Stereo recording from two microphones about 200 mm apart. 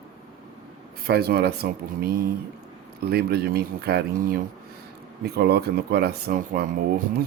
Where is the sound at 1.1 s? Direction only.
50° right (ahead or behind).